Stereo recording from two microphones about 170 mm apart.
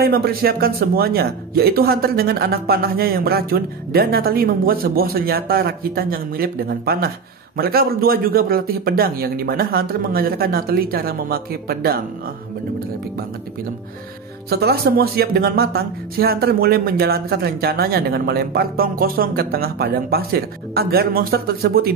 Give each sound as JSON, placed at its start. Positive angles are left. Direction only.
{"t": 0.0, "sound": "speech", "side_deg": -60}
{"t": 14.5, "sound": "speech", "side_deg": -65}